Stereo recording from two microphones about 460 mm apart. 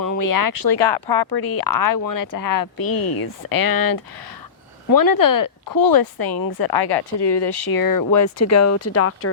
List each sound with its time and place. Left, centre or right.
0.0 s a woman's voice: left